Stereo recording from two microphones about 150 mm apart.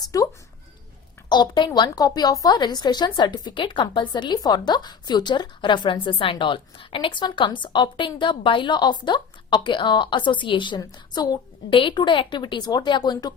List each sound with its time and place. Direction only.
1.3 s a woman's voice: 30° left (ahead or behind)